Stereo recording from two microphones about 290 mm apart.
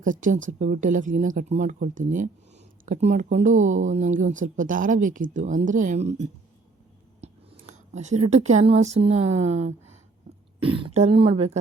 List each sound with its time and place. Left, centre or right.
0.0 s speech: right
7.2 s a sound: right
7.7 s speech: right